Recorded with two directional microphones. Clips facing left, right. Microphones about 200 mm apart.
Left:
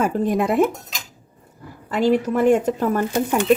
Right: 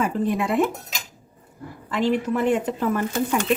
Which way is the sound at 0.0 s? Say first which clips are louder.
Left 3 dB; 45° left (ahead or behind).